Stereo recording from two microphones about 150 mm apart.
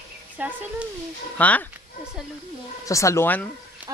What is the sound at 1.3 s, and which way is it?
Speech, 10° left (ahead or behind).